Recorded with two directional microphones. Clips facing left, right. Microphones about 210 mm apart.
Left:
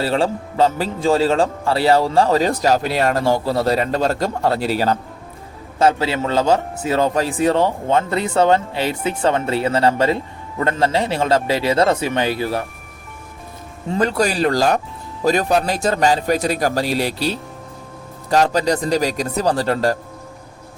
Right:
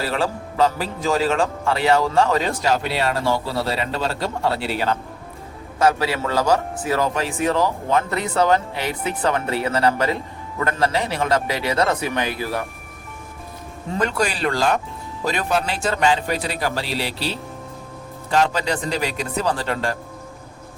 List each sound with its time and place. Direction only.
0.0 s a man's voice: 30° left (ahead or behind)
5.8 s a man's voice: 25° left (ahead or behind)
14.0 s a man's voice: 35° left (ahead or behind)